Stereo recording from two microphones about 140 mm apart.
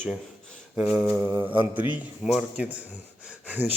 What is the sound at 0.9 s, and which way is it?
A man's voice, 10° right (ahead or behind).